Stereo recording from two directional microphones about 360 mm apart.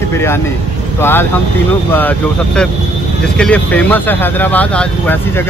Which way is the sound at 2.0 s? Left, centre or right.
Centre.